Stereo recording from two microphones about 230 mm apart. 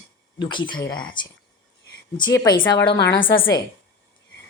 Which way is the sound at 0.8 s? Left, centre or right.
Centre.